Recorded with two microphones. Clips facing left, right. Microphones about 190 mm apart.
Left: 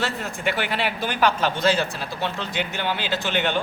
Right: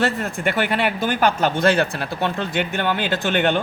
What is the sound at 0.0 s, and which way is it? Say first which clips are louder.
Speech: right 5 dB; 55° right (ahead or behind).